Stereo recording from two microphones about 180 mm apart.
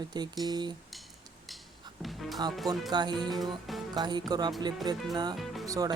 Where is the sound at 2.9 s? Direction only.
25° right (ahead or behind).